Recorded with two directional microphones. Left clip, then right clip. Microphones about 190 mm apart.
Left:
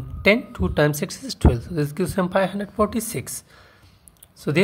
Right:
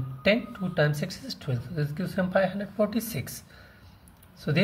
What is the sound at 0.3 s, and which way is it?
Speech, 40° left (ahead or behind).